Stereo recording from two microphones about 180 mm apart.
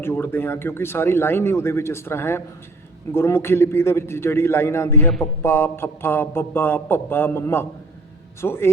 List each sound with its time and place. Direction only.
0.0 s speech: 10° left (ahead or behind)